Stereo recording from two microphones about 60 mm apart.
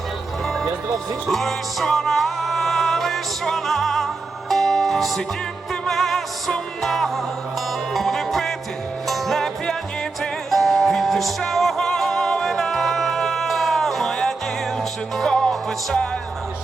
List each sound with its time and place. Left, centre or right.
1.3 s music: centre